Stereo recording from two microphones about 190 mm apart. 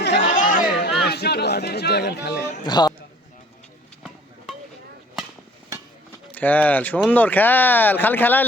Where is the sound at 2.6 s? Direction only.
20° left (ahead or behind).